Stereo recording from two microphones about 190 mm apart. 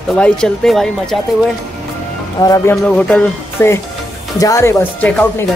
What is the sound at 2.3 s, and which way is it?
Speech, 20° left (ahead or behind).